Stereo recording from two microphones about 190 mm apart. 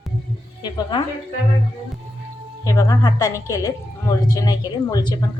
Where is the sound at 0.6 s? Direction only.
25° left (ahead or behind).